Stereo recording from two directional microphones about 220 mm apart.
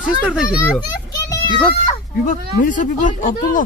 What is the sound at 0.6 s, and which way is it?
Children playing, 15° left (ahead or behind).